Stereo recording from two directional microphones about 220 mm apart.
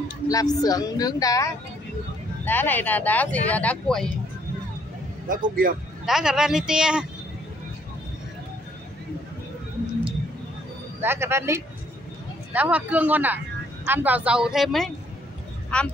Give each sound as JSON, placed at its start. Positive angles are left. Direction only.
{"t": 0.3, "sound": "speech", "side_deg": 15}
{"t": 5.3, "sound": "a man's voice", "side_deg": -40}
{"t": 6.0, "sound": "speech", "side_deg": 0}
{"t": 11.0, "sound": "speech", "side_deg": -10}